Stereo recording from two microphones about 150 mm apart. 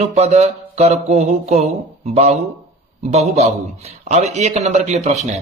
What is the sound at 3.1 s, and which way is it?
A man's voice, 45° right (ahead or behind).